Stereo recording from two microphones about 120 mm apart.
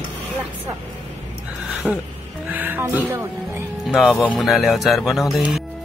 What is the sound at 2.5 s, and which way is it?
Music, 15° right (ahead or behind).